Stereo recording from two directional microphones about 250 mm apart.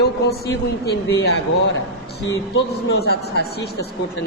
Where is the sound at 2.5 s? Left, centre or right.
Left.